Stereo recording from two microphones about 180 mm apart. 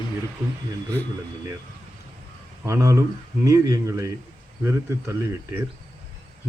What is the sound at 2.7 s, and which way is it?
Speech, 15° right (ahead or behind).